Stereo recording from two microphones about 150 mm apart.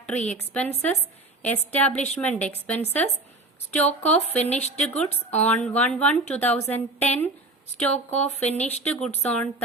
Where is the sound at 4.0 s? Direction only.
45° left (ahead or behind).